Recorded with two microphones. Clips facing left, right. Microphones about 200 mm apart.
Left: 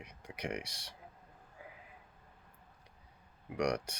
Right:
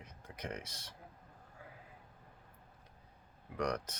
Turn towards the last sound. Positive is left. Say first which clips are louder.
# left 3 dB
turn(degrees=15)  # may be behind; listen again after turning